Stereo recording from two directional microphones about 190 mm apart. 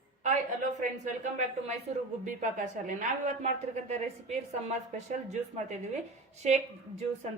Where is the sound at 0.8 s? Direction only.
40° right (ahead or behind).